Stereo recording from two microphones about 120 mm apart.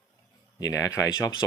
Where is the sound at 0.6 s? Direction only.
30° left (ahead or behind).